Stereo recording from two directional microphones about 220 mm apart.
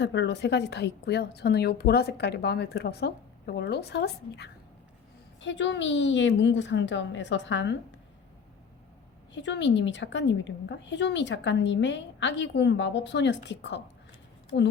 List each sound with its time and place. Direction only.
0.0 s a woman's voice: 55° left (ahead or behind)
9.3 s a woman's voice: 55° left (ahead or behind)